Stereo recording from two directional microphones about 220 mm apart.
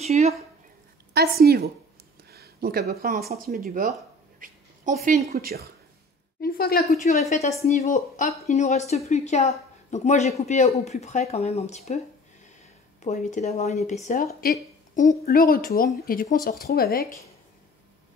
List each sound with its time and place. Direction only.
0.0 s speech: 30° right (ahead or behind)
1.1 s a woman's voice: 45° right (ahead or behind)
6.4 s a woman's voice: 45° left (ahead or behind)
13.0 s a woman's voice: 35° left (ahead or behind)